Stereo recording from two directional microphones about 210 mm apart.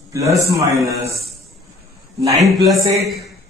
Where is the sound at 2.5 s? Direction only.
Centre (ahead or behind).